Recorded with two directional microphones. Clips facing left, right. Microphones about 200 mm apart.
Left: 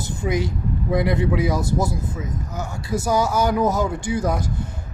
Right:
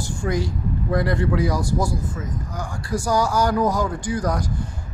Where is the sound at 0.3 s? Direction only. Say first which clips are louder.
Left 1 dB; 20° left (ahead or behind).